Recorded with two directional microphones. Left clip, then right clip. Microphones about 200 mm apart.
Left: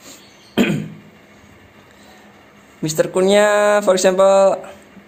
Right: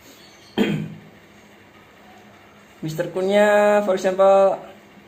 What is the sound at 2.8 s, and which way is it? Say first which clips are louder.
Speech: left 7 dB; 55° left (ahead or behind).